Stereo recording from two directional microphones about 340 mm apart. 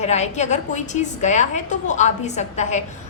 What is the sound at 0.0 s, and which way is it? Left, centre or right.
A woman's voice, centre.